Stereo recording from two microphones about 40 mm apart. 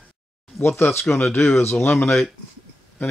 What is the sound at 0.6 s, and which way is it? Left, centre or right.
Speech, left.